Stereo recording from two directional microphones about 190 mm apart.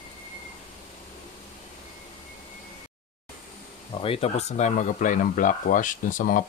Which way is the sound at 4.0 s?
30° left (ahead or behind).